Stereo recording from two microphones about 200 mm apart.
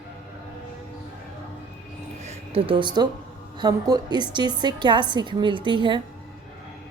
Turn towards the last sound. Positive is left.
turn(degrees=-25)  # may be behind; listen again after turning